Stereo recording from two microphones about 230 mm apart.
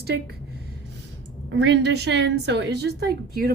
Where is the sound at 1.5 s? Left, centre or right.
Right.